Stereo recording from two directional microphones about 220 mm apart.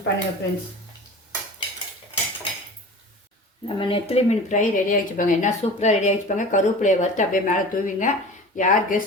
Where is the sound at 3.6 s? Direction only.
25° left (ahead or behind).